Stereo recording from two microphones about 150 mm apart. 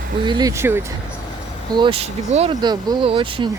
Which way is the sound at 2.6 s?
30° right (ahead or behind).